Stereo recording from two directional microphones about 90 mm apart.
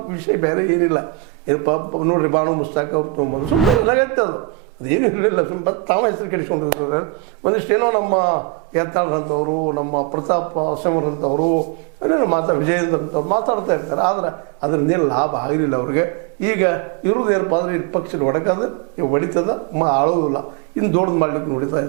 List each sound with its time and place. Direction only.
0.1 s a man's voice: 15° right (ahead or behind)
4.9 s a man's voice: 15° right (ahead or behind)